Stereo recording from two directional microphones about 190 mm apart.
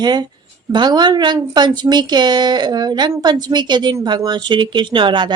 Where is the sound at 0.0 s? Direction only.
20° right (ahead or behind).